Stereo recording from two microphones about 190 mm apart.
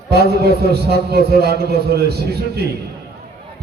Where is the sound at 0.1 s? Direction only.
60° right (ahead or behind).